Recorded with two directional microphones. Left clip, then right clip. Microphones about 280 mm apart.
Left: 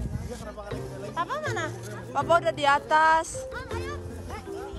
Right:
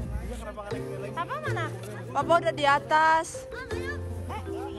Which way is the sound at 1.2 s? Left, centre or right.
Left.